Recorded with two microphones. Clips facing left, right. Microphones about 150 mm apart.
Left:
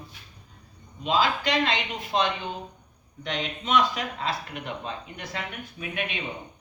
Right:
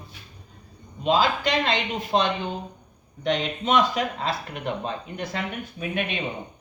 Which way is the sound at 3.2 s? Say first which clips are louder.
Right 7 dB; 45° right (ahead or behind).